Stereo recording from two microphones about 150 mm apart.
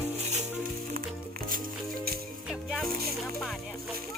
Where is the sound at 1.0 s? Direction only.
80° right.